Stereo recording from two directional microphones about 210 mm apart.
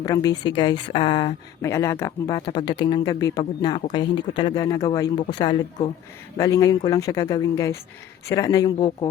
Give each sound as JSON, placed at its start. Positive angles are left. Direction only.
{"t": 0.0, "sound": "speech", "side_deg": 15}